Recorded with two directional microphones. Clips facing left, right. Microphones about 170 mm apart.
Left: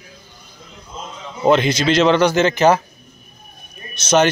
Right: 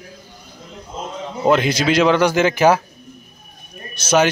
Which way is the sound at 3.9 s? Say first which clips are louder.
Left 1 dB; 10° right (ahead or behind).